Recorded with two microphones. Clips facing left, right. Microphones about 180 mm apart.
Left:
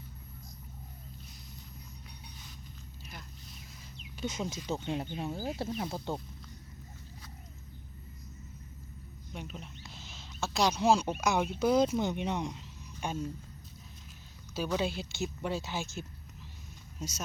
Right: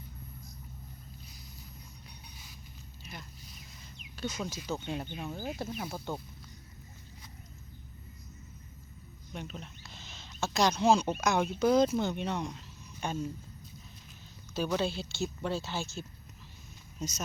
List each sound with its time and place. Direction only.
3.1 s a sound: centre (ahead or behind)
4.2 s speech: 20° left (ahead or behind)
9.3 s speech: 10° left (ahead or behind)
14.5 s speech: 10° left (ahead or behind)